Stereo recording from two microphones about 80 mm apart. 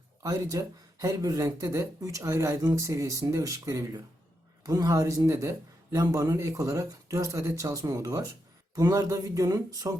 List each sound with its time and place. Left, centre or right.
0.2 s a man's voice: right